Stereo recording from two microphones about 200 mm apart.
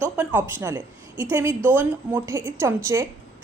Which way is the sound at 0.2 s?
10° right (ahead or behind).